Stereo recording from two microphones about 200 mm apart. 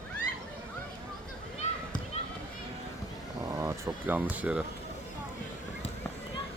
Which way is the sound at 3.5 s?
15° right (ahead or behind).